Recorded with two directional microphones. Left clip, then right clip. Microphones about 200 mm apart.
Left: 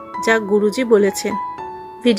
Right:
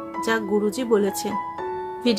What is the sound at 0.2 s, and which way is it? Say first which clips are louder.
A woman's voice: left 7 dB; 20° left (ahead or behind).